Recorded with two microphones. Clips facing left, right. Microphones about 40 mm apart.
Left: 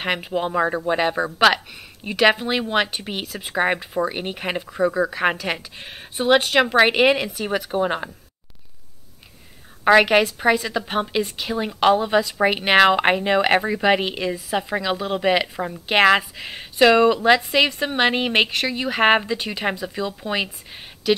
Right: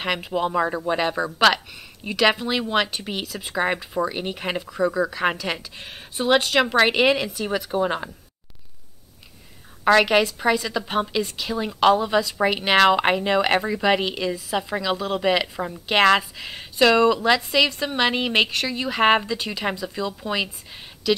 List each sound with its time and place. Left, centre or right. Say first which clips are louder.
0.0 s speech: left 1 dB; centre
9.8 s speech: left 2 dB; centre